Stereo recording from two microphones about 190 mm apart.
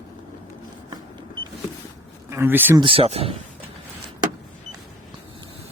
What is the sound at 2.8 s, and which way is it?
Speech, 30° right (ahead or behind).